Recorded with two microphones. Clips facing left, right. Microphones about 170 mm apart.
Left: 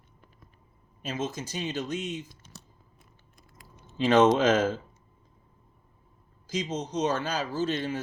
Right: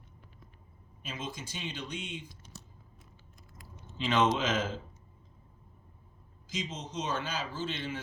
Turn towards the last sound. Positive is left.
turn(degrees=40)  # may be behind; listen again after turning